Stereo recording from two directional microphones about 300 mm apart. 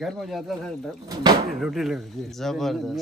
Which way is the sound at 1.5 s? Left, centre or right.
Centre.